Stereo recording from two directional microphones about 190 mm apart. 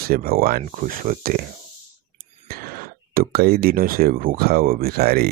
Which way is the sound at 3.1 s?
50° right (ahead or behind).